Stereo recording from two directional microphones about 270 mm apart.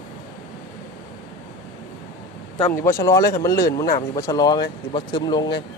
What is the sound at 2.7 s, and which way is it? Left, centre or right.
Speech, centre.